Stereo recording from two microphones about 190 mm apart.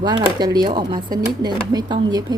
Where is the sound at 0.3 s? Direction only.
20° right (ahead or behind).